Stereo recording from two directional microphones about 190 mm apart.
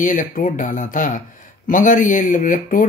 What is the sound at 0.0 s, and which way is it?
Speech, 45° left (ahead or behind).